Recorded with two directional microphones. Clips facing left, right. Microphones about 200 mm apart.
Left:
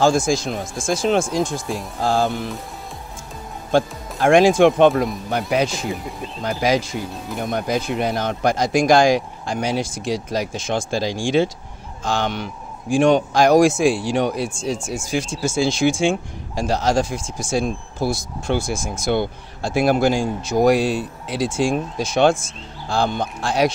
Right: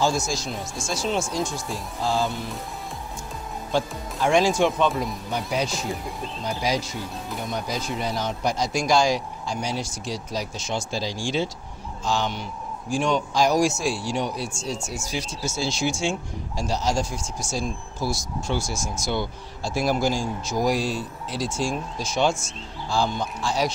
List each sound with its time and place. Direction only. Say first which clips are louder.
0.1 s speech: left 8 dB; 50° left (ahead or behind); by 1.6 s 90° left
2.0 s speech: left 5 dB; 55° left (ahead or behind)
3.7 s speech: left 7 dB; 55° left (ahead or behind); by 5.7 s 75° left (ahead or behind)
6.6 s speech: left 7 dB; 90° left
7.4 s speech: left 8 dB; 55° left (ahead or behind)
9.6 s speech: left 9 dB; 90° left
10.5 s speech: left 6 dB; 55° left (ahead or behind); by 17.3 s 90° left
17.4 s speech: left 8 dB; 60° left (ahead or behind)